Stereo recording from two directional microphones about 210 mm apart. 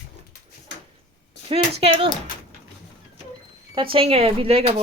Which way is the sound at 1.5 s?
30° right (ahead or behind).